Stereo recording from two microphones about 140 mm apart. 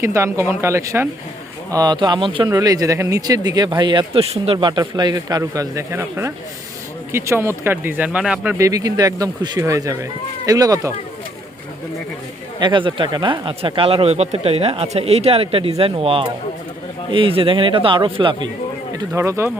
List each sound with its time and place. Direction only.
0.0 s a man's voice: 20° right (ahead or behind); by 2.5 s 35° right (ahead or behind)
2.5 s speech: 25° right (ahead or behind); by 4.5 s 45° right (ahead or behind)
4.5 s speech: 30° right (ahead or behind); by 8.5 s 5° right (ahead or behind)
8.5 s speech: 25° right (ahead or behind)
12.5 s a man's voice: 35° right (ahead or behind)
18.9 s speech: 20° right (ahead or behind)